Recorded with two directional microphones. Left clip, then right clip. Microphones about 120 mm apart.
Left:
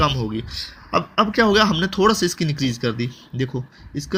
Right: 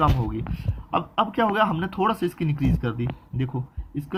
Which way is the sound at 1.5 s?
40° left (ahead or behind).